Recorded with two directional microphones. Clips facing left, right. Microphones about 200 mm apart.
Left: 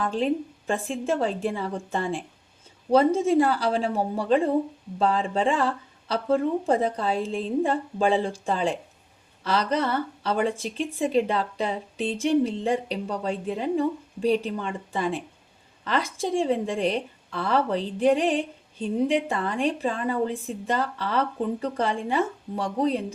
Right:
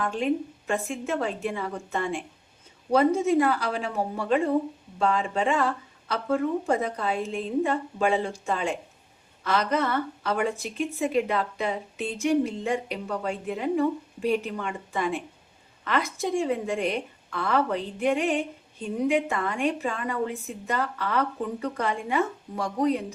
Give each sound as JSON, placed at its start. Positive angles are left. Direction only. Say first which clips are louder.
{"t": 0.0, "sound": "a woman's voice", "louder": "left 1 dB", "side_deg": 35}